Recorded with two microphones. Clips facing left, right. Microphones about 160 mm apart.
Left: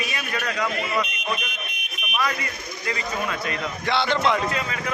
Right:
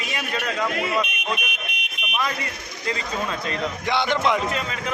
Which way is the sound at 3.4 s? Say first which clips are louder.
Right 1 dB; 15° right (ahead or behind).